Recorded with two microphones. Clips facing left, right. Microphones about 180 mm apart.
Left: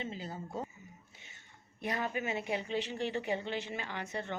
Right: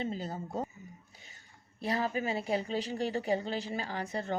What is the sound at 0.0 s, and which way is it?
Speech, 40° right (ahead or behind).